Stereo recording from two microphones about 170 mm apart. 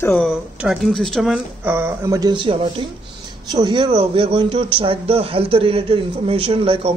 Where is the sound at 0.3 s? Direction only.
5° right (ahead or behind).